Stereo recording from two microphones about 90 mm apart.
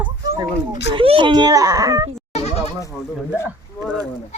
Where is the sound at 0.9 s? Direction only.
80° right.